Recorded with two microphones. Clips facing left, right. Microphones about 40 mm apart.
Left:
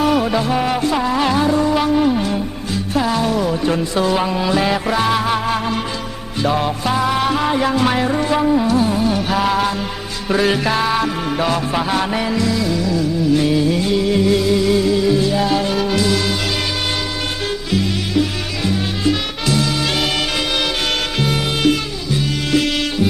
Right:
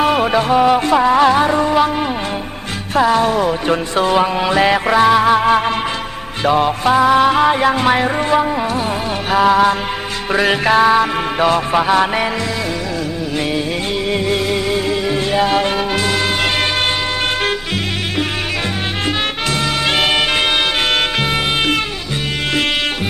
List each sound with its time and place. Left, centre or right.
0.0 s music: right
0.5 s music: right
0.9 s music: right
3.0 s music: right
4.9 s music: right
9.4 s music: right
20.0 s music: right